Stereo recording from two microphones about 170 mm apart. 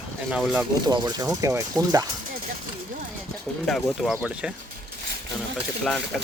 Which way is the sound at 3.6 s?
Centre (ahead or behind).